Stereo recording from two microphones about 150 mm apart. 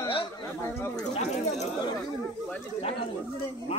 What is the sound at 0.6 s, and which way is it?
Speech, 20° left (ahead or behind).